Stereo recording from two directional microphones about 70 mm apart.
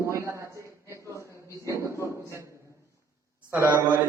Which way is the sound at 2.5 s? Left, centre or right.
Right.